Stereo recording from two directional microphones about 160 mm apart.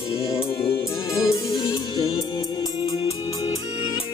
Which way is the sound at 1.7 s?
35° left (ahead or behind).